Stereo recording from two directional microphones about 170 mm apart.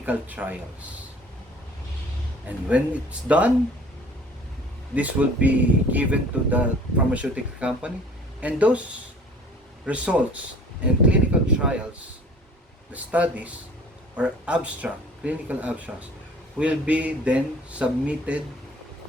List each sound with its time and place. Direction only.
0.0 s speech: 10° right (ahead or behind)
2.6 s speech: 10° right (ahead or behind)
4.9 s speech: 10° right (ahead or behind)
9.8 s speech: 5° right (ahead or behind)
12.9 s speech: 10° right (ahead or behind)